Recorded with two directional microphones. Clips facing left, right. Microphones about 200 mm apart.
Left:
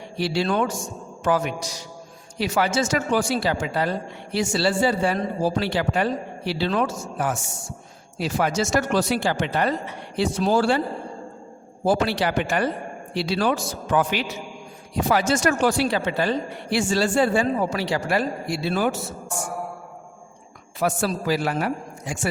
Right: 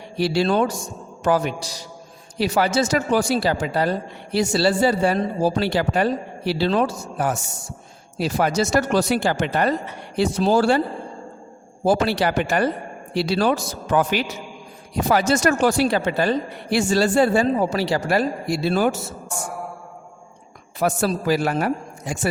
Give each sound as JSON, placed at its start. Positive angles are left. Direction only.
{"t": 0.2, "sound": "speech", "side_deg": -40}
{"t": 11.9, "sound": "speech", "side_deg": -40}
{"t": 20.7, "sound": "speech", "side_deg": -40}